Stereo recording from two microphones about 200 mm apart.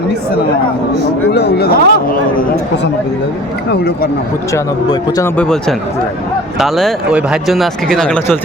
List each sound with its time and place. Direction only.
1.3 s speech: 55° left (ahead or behind)
3.7 s speech: 50° left (ahead or behind)
4.5 s speech: 15° left (ahead or behind)
5.4 s speech: 5° left (ahead or behind)